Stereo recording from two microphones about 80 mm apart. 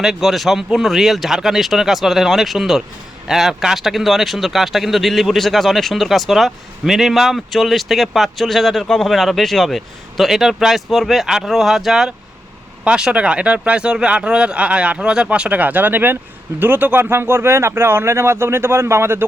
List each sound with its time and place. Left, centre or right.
0.0 s speech: centre; by 19.2 s right